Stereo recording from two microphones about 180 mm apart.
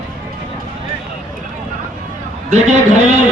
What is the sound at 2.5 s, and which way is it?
Speech, 40° right (ahead or behind).